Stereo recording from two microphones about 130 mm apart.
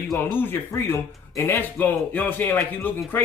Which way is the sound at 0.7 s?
20° left (ahead or behind).